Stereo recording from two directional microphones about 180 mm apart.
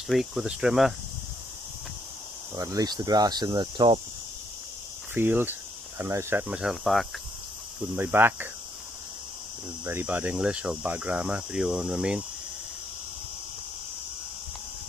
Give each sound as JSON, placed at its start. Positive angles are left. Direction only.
{"t": 0.1, "sound": "speech", "side_deg": 0}
{"t": 2.5, "sound": "speech", "side_deg": -20}
{"t": 5.1, "sound": "speech", "side_deg": -10}
{"t": 6.4, "sound": "speech", "side_deg": -5}
{"t": 7.9, "sound": "speech", "side_deg": -10}
{"t": 9.8, "sound": "speech", "side_deg": -10}